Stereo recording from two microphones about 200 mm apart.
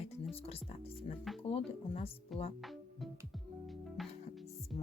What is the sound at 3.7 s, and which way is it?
Music, centre (ahead or behind).